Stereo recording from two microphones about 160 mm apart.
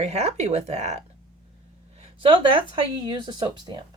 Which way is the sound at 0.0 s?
40° right (ahead or behind).